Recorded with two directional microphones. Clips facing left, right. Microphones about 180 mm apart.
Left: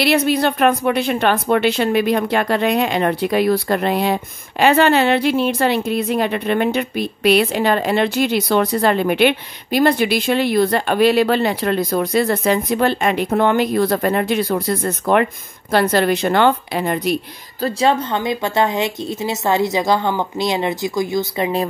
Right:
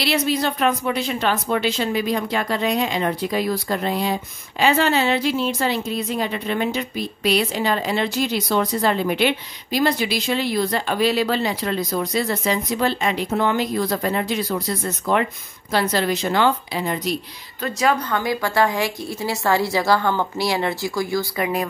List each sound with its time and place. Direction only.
0.0 s a woman's voice: 60° left (ahead or behind)
17.6 s a woman's voice: 30° left (ahead or behind)